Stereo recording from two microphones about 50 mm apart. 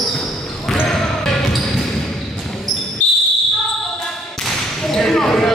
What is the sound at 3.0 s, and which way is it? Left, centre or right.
Basketball bounce, left.